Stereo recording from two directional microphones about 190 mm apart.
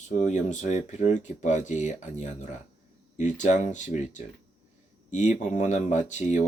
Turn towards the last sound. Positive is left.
turn(degrees=40)  # may be behind; listen again after turning